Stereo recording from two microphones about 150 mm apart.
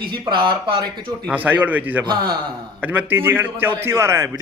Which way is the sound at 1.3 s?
10° right (ahead or behind).